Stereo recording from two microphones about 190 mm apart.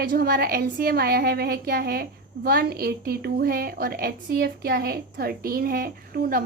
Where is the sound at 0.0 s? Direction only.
50° right (ahead or behind).